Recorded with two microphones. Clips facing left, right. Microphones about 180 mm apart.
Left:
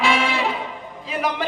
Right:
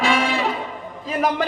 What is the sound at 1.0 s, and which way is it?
Speech, 45° right (ahead or behind).